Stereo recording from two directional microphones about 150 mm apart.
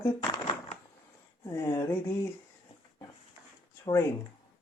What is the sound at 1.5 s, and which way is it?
Speech, 25° left (ahead or behind).